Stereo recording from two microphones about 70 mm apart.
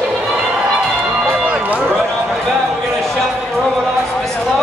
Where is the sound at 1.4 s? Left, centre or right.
Centre.